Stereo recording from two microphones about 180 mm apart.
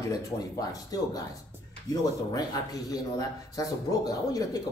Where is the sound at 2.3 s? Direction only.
20° left (ahead or behind).